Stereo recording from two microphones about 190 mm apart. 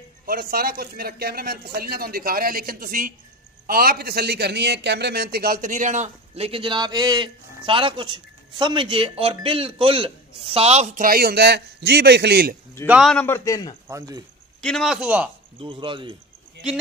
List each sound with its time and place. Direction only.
0.3 s a man's voice: 50° right (ahead or behind)
11.1 s a man's voice: 55° right (ahead or behind)
12.8 s a man's voice: 5° right (ahead or behind); by 13.7 s 20° left (ahead or behind)
13.8 s speech: 15° right (ahead or behind)
14.6 s speech: centre (ahead or behind)
15.6 s speech: 25° right (ahead or behind)